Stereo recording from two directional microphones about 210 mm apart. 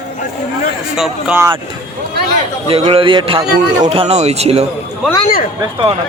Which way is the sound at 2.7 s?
25° right (ahead or behind).